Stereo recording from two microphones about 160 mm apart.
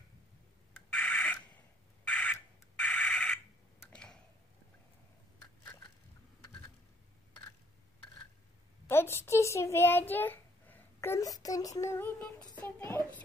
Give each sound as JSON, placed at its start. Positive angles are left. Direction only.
{"t": 0.9, "sound": "a sound", "side_deg": 5}
{"t": 3.9, "sound": "tick-tock", "side_deg": 5}
{"t": 8.8, "sound": "a child's voice", "side_deg": 15}